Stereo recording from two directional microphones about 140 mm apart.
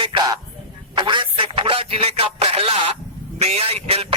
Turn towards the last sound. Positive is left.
turn(degrees=-45)  # may be behind; listen again after turning